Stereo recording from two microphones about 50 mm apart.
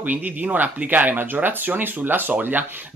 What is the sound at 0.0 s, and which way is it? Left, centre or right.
Speech, right.